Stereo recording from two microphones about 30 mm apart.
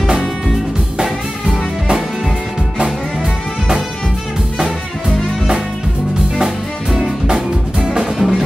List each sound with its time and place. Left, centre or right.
6.3 s music: centre